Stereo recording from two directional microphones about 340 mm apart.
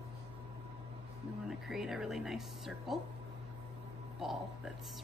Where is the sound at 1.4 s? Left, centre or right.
Centre.